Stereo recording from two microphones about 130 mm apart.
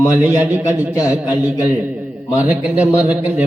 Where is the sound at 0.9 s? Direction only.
30° left (ahead or behind).